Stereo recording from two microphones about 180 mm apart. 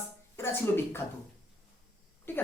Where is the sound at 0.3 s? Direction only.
15° left (ahead or behind).